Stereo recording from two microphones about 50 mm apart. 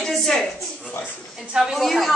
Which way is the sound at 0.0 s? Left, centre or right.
Centre.